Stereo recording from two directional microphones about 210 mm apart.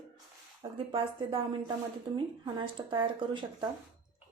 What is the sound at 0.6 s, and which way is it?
Speech, 25° right (ahead or behind).